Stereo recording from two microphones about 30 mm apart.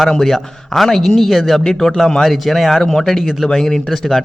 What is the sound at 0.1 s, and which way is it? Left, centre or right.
Speech, centre.